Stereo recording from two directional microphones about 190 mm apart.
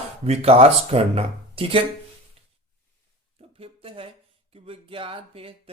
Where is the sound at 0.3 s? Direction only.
30° right (ahead or behind).